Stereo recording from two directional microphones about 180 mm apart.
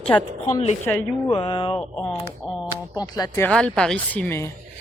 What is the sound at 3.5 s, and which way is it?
Speech, 5° left (ahead or behind).